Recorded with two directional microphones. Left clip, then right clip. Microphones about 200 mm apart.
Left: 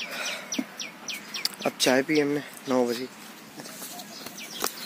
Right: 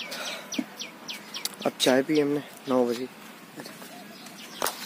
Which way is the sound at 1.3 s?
10° right (ahead or behind).